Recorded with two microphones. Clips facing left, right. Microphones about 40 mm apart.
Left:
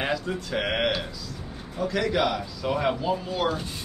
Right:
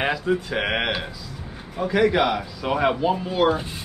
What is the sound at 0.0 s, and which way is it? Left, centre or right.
Speech, centre.